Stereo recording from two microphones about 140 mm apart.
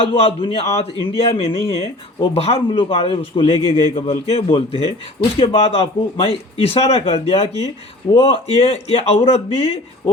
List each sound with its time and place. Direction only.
0.0 s a man's voice: 40° left (ahead or behind)